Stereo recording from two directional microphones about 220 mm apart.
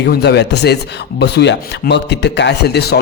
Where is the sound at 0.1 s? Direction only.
50° left (ahead or behind).